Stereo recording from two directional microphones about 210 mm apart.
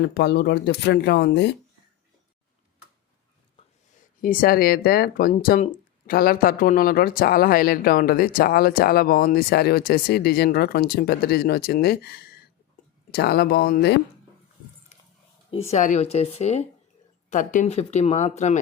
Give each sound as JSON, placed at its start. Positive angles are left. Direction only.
{"t": 0.0, "sound": "speech", "side_deg": 50}
{"t": 4.2, "sound": "speech", "side_deg": 40}
{"t": 14.9, "sound": "keys jangling", "side_deg": 35}
{"t": 15.7, "sound": "speech", "side_deg": 35}